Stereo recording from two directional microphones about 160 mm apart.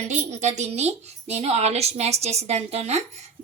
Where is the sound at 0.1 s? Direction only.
45° right (ahead or behind).